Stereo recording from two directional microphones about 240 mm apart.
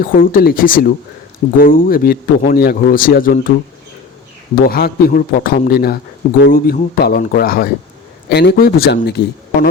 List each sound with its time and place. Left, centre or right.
0.0 s a man's voice: left
4.6 s a man's voice: left